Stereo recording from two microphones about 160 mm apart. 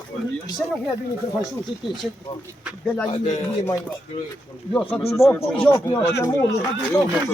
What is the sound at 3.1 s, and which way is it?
Speech, 45° left (ahead or behind).